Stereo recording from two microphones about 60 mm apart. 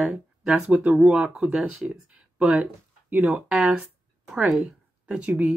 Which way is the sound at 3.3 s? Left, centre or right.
Right.